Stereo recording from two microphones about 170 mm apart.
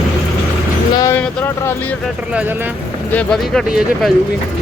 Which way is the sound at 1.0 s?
15° left (ahead or behind).